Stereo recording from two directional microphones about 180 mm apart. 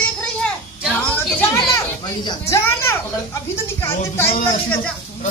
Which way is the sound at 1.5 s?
20° left (ahead or behind).